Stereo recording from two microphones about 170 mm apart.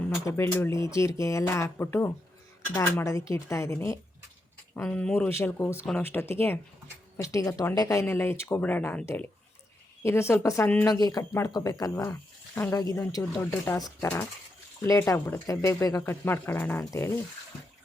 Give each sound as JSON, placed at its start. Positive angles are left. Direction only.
{"t": 0.3, "sound": "speech", "side_deg": 15}